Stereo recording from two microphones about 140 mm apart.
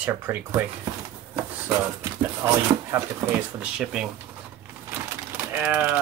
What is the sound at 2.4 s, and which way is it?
Speech, 20° right (ahead or behind).